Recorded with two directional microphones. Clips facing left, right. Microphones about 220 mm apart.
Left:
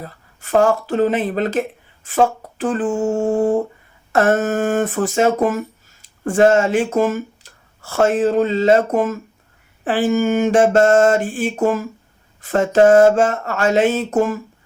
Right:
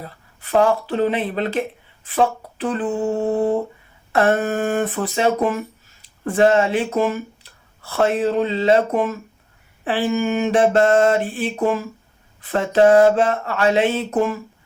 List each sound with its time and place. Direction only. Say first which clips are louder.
0.3 s speech: left 2 dB; 45° left (ahead or behind)